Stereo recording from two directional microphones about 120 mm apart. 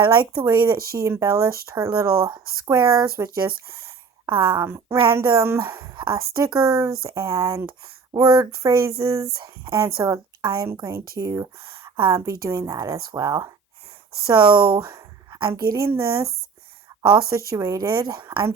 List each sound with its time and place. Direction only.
0.4 s speech: 20° right (ahead or behind)
4.3 s speech: 40° right (ahead or behind)
4.6 s speech: 25° right (ahead or behind)
14.5 s a woman's voice: 30° right (ahead or behind)
16.9 s a sound: 30° right (ahead or behind)
17.3 s speech: 25° right (ahead or behind)